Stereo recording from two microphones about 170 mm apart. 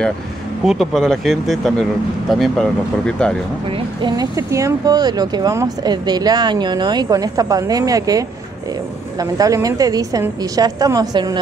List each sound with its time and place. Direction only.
0.7 s speech: centre (ahead or behind)
3.7 s speech: 30° right (ahead or behind)
4.4 s speech: 15° right (ahead or behind)